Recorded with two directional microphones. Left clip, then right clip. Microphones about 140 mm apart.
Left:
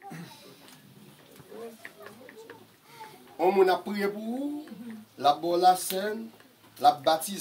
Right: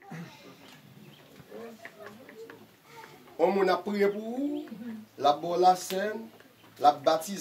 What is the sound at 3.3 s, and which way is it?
Speech, 15° right (ahead or behind).